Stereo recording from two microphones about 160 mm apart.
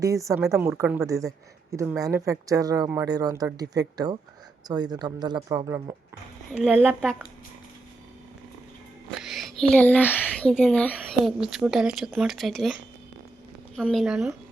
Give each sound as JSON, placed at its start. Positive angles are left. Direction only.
{"t": 0.0, "sound": "speech", "side_deg": -20}
{"t": 6.5, "sound": "speech", "side_deg": -5}
{"t": 9.2, "sound": "speech", "side_deg": 0}
{"t": 13.8, "sound": "speech", "side_deg": 0}